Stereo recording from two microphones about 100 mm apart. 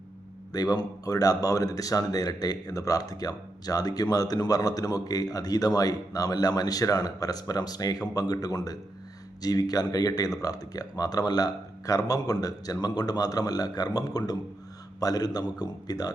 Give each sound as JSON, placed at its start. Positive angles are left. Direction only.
{"t": 0.5, "sound": "speech", "side_deg": 40}